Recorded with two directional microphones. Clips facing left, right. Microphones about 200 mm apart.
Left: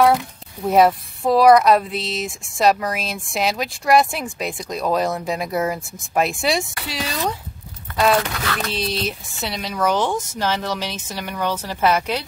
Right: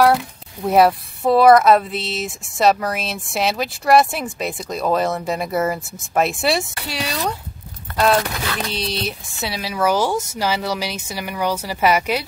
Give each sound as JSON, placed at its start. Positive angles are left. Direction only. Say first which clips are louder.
{"t": 0.7, "sound": "speech", "louder": "right 1 dB", "side_deg": 0}